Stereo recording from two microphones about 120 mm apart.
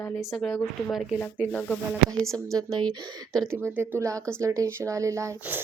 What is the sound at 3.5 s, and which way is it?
Speech, 20° right (ahead or behind).